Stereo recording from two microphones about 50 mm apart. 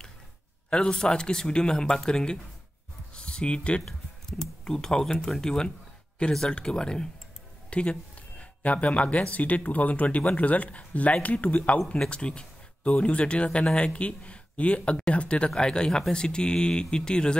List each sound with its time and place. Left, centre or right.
0.7 s speech: centre
3.8 s a sound: centre
5.2 s speech: centre